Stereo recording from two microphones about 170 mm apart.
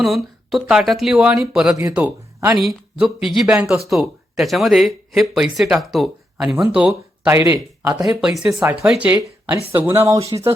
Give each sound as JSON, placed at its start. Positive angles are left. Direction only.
{"t": 0.0, "sound": "speech", "side_deg": 0}
{"t": 7.3, "sound": "speech", "side_deg": -15}
{"t": 8.2, "sound": "speech", "side_deg": 0}